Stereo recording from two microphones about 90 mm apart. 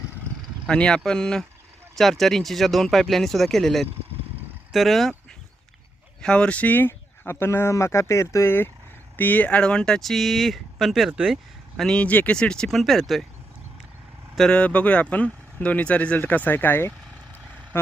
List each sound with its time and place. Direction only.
0.7 s speech: 10° left (ahead or behind)
6.2 s speech: 10° left (ahead or behind)
11.8 s speech: 10° left (ahead or behind)
14.3 s speech: 10° left (ahead or behind)